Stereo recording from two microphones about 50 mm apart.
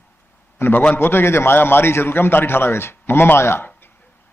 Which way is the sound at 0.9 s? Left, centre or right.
Left.